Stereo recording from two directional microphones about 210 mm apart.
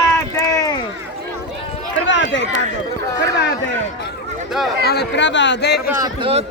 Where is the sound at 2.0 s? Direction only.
60° left (ahead or behind).